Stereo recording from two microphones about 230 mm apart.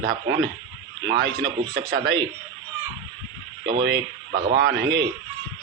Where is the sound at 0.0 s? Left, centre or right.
Right.